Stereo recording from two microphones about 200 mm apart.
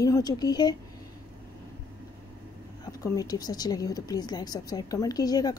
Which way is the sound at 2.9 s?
15° left (ahead or behind).